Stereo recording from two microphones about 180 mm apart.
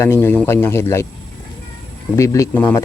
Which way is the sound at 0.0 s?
15° left (ahead or behind).